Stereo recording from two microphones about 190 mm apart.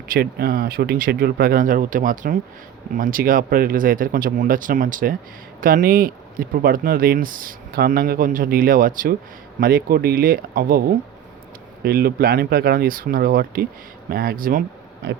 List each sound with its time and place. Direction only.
0.1 s speech: 55° right (ahead or behind)